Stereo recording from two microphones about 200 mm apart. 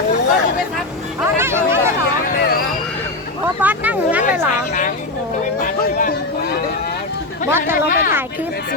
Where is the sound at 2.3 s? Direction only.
50° left (ahead or behind).